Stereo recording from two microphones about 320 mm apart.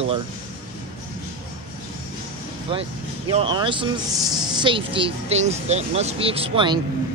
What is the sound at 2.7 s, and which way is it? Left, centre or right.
Speech, centre.